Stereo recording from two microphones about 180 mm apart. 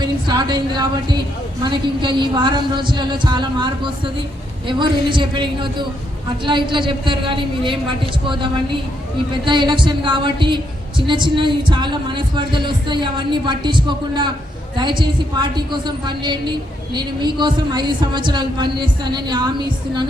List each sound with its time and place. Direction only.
0.0 s a woman's voice: 25° right (ahead or behind)